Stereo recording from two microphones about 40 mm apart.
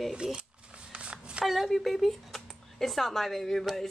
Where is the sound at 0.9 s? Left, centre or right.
Right.